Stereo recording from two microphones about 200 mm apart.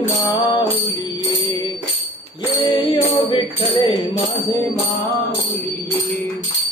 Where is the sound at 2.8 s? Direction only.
25° left (ahead or behind).